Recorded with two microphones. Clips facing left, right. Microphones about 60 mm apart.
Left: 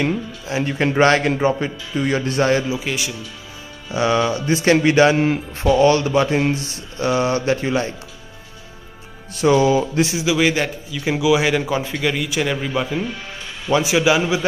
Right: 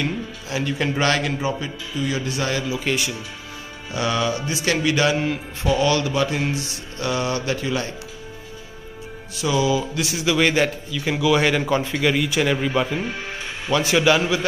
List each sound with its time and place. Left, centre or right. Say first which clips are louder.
0.0 s speech: left 4 dB; left
2.8 s a man's voice: right 1 dB; centre
3.9 s speech: left 4 dB; left
9.3 s speech: left 6 dB; left
10.1 s a man's voice: right 2 dB; centre
10.9 s a man's voice: left 2 dB; centre
13.7 s a man's voice: left 2 dB; centre